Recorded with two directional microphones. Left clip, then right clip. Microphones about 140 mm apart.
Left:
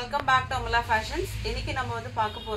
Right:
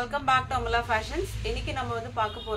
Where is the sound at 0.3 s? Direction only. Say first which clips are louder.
Left 1 dB; 10° right (ahead or behind).